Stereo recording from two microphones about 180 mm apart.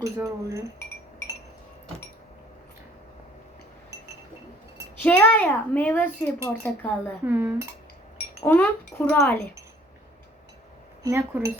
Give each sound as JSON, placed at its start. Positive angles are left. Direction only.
{"t": 0.0, "sound": "speech", "side_deg": -15}
{"t": 5.0, "sound": "a child's voice", "side_deg": 10}
{"t": 7.3, "sound": "speech", "side_deg": -10}
{"t": 8.4, "sound": "a child's voice", "side_deg": 10}
{"t": 11.0, "sound": "speech", "side_deg": -15}